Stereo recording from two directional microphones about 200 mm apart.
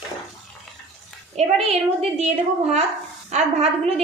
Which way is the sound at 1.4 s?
35° right (ahead or behind).